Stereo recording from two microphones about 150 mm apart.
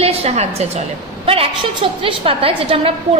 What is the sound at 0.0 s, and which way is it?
A woman's voice, 45° right (ahead or behind).